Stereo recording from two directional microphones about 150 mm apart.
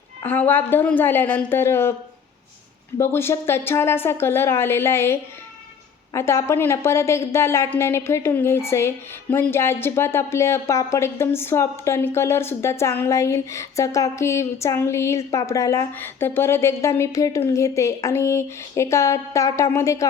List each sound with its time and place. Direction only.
0.2 s a woman's voice: 15° left (ahead or behind)
3.0 s a woman's voice: 15° left (ahead or behind)